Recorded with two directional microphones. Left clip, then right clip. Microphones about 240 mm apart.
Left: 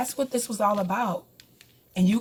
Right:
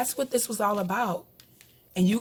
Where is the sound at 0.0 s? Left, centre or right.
Right.